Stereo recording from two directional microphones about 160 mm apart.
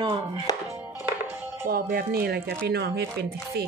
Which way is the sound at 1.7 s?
70° right (ahead or behind).